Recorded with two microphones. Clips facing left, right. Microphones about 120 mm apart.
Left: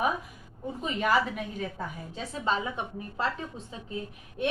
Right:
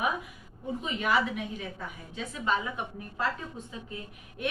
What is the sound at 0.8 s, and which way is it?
Speech, 40° left (ahead or behind).